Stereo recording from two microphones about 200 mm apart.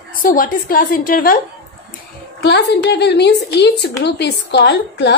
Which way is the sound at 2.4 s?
55° left (ahead or behind).